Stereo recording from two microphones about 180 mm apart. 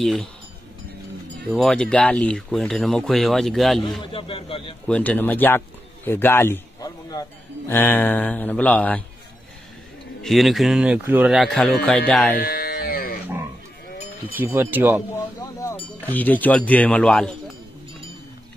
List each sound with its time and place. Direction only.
0.0 s speech: centre (ahead or behind)
1.5 s speech: centre (ahead or behind)
4.0 s speech: 30° left (ahead or behind)
4.8 s a man's voice: 10° left (ahead or behind)
10.2 s speech: centre (ahead or behind)
12.4 s a sound: 60° left (ahead or behind)
14.3 s speech: 10° right (ahead or behind)
16.0 s a man's voice: 10° left (ahead or behind)